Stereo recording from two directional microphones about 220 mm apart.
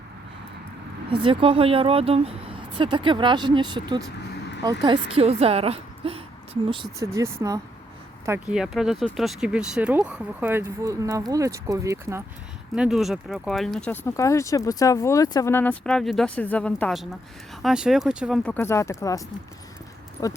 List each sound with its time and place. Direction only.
1.1 s a woman's voice: 25° right (ahead or behind)
7.0 s speech: 15° right (ahead or behind)
12.7 s speech: 5° right (ahead or behind); by 20.3 s 15° left (ahead or behind)